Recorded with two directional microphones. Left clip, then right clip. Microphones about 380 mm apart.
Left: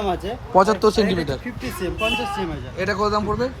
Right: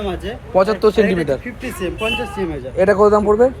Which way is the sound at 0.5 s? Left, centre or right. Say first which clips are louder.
Right 2 dB; centre.